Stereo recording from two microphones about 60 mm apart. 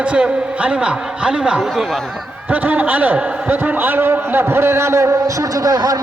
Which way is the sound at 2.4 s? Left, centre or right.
Right.